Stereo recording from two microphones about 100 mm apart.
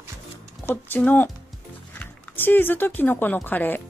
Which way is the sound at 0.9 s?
15° left (ahead or behind).